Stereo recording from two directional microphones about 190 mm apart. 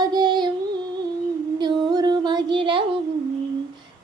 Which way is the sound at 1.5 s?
25° right (ahead or behind).